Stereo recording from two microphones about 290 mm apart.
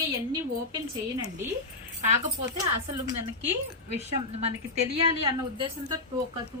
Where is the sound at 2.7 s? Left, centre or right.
Right.